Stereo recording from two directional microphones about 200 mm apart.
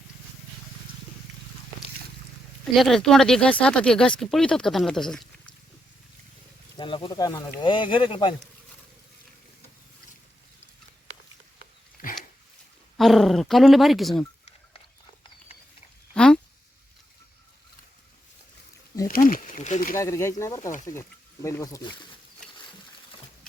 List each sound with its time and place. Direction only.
2.7 s speech: centre (ahead or behind)
6.7 s speech: 25° left (ahead or behind)
12.0 s dog: 45° left (ahead or behind)
13.0 s speech: centre (ahead or behind)
16.1 s a sound: 5° left (ahead or behind)
19.0 s a sound: 45° left (ahead or behind)
20.0 s speech: 15° left (ahead or behind)